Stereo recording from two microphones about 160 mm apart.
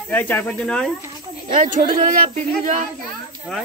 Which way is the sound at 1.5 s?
55° right (ahead or behind).